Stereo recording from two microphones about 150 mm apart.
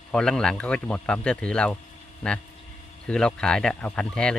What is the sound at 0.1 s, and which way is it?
Speech, 5° left (ahead or behind).